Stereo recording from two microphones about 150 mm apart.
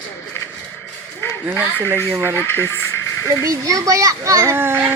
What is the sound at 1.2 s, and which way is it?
Speech, 15° left (ahead or behind).